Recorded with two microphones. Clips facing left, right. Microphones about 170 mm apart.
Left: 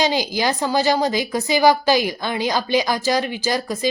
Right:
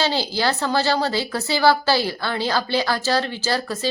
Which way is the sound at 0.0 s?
15° left (ahead or behind).